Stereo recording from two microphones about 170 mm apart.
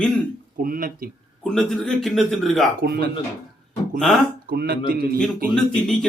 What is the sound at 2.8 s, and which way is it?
Speech, 65° right (ahead or behind).